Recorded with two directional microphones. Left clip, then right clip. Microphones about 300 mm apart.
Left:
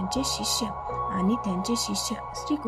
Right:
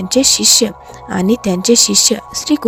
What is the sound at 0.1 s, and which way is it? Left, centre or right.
Speech, right.